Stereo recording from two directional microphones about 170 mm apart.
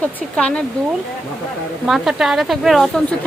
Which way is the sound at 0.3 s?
5° left (ahead or behind).